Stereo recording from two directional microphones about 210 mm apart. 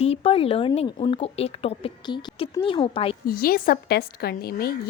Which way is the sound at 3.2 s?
45° left (ahead or behind).